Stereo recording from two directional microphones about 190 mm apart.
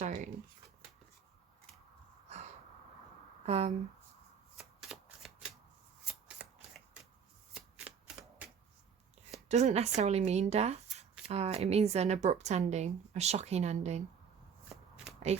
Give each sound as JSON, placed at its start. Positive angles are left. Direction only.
{"t": 0.0, "sound": "shuffling cards", "side_deg": -40}
{"t": 2.2, "sound": "a sound", "side_deg": -35}
{"t": 3.4, "sound": "speech", "side_deg": -35}
{"t": 4.5, "sound": "shuffling cards", "side_deg": -5}
{"t": 9.5, "sound": "speech", "side_deg": -35}